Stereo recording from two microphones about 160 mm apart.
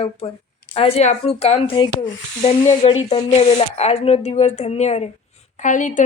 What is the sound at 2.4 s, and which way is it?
Speech, 40° left (ahead or behind).